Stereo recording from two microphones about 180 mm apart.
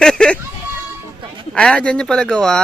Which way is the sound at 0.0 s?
5° left (ahead or behind).